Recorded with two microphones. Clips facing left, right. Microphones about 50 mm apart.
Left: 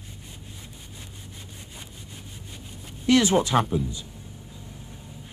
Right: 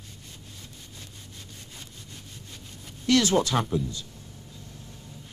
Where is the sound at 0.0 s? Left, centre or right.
Centre.